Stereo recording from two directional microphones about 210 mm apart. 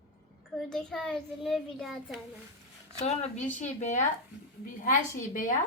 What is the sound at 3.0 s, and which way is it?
A woman's voice, 35° left (ahead or behind).